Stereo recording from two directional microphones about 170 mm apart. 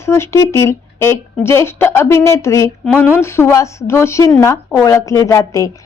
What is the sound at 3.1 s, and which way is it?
A woman's voice, 15° left (ahead or behind).